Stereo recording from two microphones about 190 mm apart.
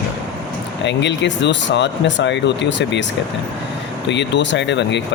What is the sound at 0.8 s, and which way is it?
Speech, 70° left (ahead or behind).